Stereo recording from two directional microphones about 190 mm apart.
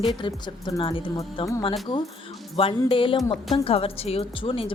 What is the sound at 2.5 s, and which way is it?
Speech, 30° left (ahead or behind).